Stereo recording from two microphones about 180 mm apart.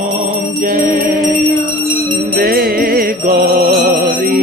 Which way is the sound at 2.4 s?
55° right (ahead or behind).